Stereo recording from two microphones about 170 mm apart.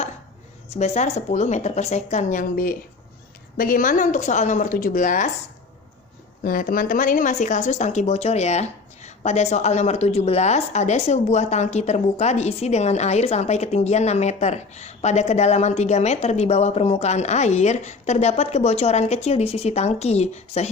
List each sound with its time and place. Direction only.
0.7 s a woman's voice: 40° left (ahead or behind)
6.4 s speech: 55° left (ahead or behind)